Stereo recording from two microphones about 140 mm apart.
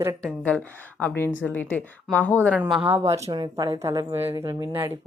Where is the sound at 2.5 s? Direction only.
10° right (ahead or behind).